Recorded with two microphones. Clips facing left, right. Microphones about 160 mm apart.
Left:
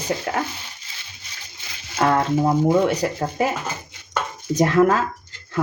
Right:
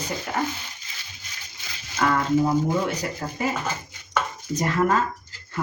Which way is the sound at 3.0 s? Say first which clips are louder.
Left 7 dB; 70° left (ahead or behind).